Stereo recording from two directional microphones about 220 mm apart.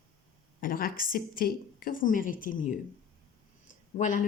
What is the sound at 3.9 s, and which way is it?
Speech, 35° left (ahead or behind).